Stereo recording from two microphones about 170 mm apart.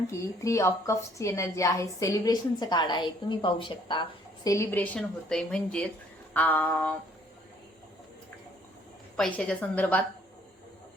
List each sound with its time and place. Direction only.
0.1 s a woman's voice: 20° left (ahead or behind)
4.4 s speech: 15° left (ahead or behind)
9.1 s speech: 5° left (ahead or behind)